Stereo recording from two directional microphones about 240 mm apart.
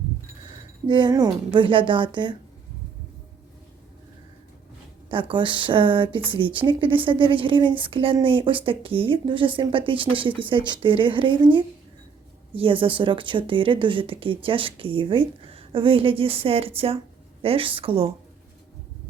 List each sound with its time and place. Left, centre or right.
0.9 s speech: centre
5.1 s speech: right
12.5 s speech: right